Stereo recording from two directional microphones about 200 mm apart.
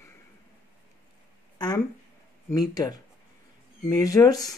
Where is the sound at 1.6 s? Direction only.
20° left (ahead or behind).